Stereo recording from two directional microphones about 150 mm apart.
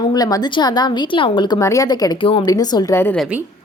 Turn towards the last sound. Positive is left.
turn(degrees=15)  # may be behind; listen again after turning